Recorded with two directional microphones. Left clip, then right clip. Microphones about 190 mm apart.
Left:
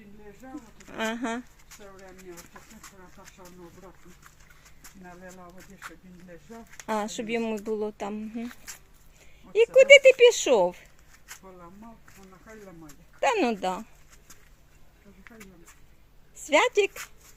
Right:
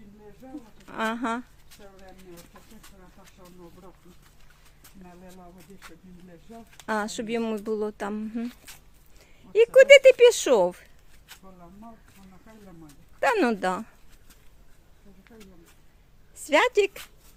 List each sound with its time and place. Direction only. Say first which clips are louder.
0.5 s speech: right 2 dB; 10° right (ahead or behind)
6.7 s speech: right 1 dB; 10° right (ahead or behind)
9.5 s speech: right 1 dB; 20° right (ahead or behind)
13.1 s speech: right 2 dB; 15° right (ahead or behind)
16.5 s speech: right 1 dB; 10° right (ahead or behind)